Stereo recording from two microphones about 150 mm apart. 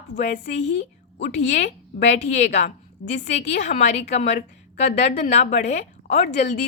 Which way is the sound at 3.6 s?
50° left (ahead or behind).